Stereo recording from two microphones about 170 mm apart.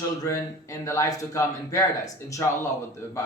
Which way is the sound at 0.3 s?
20° left (ahead or behind).